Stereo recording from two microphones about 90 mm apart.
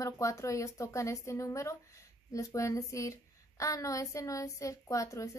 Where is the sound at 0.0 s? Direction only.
35° left (ahead or behind).